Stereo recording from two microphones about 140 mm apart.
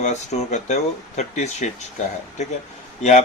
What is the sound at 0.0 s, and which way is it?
Speech, 55° left (ahead or behind).